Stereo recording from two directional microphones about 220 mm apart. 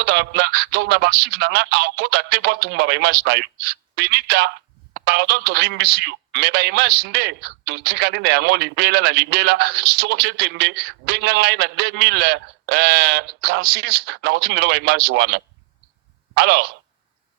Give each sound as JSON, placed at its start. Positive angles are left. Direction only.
{"t": 0.0, "sound": "speech", "side_deg": -45}